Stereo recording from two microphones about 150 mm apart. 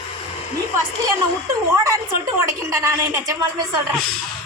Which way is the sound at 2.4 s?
20° right (ahead or behind).